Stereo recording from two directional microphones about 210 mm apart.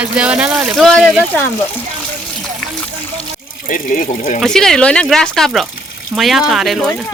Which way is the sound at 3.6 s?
40° left (ahead or behind).